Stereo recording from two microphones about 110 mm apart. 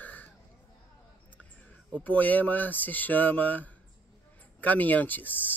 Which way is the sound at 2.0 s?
15° left (ahead or behind).